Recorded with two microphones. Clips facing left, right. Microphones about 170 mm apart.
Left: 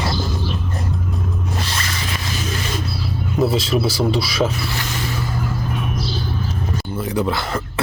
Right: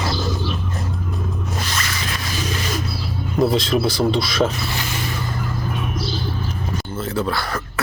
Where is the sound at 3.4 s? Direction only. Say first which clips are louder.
Right 1 dB; 5° left (ahead or behind).